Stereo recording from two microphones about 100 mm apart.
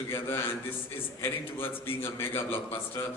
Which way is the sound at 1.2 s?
25° left (ahead or behind).